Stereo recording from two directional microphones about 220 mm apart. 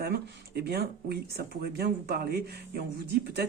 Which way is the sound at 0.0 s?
45° right (ahead or behind).